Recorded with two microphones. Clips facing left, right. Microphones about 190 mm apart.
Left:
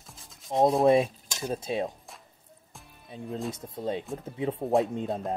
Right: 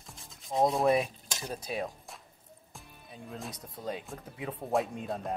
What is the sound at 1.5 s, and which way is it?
Speech, 25° left (ahead or behind).